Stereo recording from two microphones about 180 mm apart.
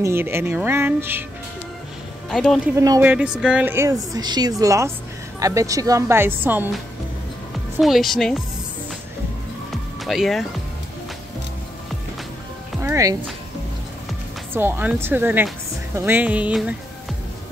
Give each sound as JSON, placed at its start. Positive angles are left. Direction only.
{"t": 0.0, "sound": "speech", "side_deg": -15}
{"t": 2.3, "sound": "speech", "side_deg": 0}
{"t": 2.7, "sound": "speech", "side_deg": -20}
{"t": 3.1, "sound": "speech", "side_deg": -5}
{"t": 7.8, "sound": "speech", "side_deg": 0}
{"t": 9.7, "sound": "music", "side_deg": 0}
{"t": 12.8, "sound": "speech", "side_deg": -15}
{"t": 14.5, "sound": "speech", "side_deg": -10}